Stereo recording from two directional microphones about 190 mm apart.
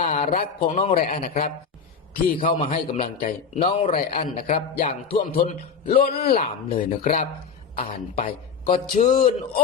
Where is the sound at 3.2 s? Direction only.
45° left (ahead or behind).